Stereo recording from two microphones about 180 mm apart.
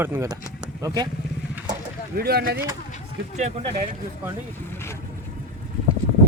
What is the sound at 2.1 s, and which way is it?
Speech, 60° right (ahead or behind).